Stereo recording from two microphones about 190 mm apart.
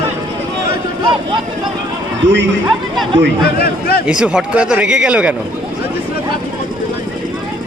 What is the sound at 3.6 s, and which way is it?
Speech, 55° left (ahead or behind).